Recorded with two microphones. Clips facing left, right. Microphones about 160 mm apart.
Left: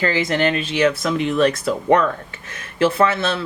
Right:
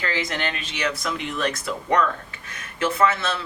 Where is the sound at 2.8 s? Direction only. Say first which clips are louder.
Left 5 dB; 30° left (ahead or behind).